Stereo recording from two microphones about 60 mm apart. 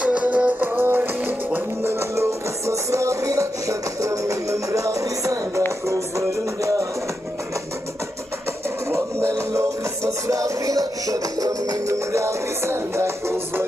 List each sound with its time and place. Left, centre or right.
0.0 s music: right
9.6 s music: right